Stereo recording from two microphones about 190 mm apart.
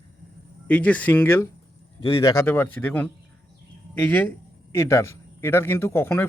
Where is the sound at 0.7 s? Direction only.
10° left (ahead or behind).